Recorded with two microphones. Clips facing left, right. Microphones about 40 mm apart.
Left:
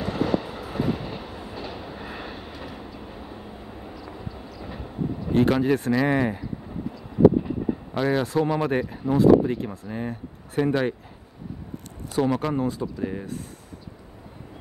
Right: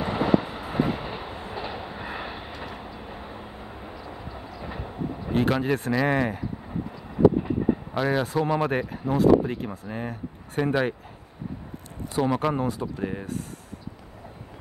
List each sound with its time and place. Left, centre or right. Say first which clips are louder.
0.0 s train: right 2 dB; centre
2.5 s vehicle: right 1 dB; centre
5.3 s speech: left 3 dB; centre
7.9 s speech: left 1 dB; centre
12.2 s speech: left 1 dB; centre